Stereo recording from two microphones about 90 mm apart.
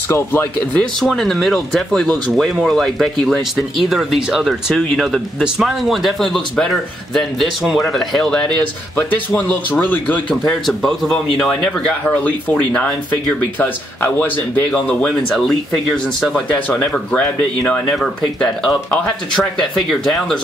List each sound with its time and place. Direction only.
0.1 s speech: 25° left (ahead or behind)
0.7 s speech: 5° left (ahead or behind)
8.9 s speech: 20° left (ahead or behind)
10.5 s speech: 5° left (ahead or behind)
16.4 s speech: 15° left (ahead or behind); by 20.3 s centre (ahead or behind)